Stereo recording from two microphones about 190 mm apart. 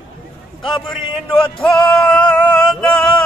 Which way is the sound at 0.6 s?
25° left (ahead or behind).